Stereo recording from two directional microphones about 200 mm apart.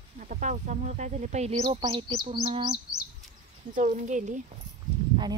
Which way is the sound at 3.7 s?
40° right (ahead or behind).